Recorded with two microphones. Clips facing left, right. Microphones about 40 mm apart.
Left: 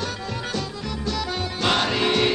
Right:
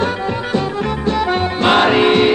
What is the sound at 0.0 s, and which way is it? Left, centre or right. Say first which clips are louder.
Music: right 10 dB; right.